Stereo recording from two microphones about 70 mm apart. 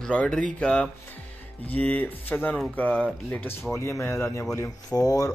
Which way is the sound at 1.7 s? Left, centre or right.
Left.